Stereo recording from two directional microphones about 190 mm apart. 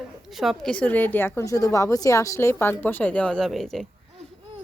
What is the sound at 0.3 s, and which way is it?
A woman's voice, centre (ahead or behind).